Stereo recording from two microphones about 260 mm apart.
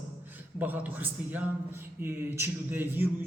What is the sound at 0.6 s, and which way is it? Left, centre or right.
A man's voice, centre.